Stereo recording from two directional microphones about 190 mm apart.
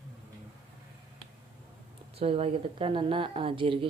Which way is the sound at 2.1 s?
30° right (ahead or behind).